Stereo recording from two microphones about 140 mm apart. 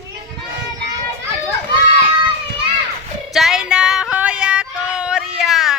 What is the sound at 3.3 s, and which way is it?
Yodeling, 5° right (ahead or behind).